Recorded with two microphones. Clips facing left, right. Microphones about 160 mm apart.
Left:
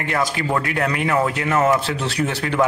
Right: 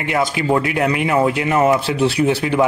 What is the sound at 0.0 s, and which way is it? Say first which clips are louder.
Speech: right 3 dB; 15° right (ahead or behind).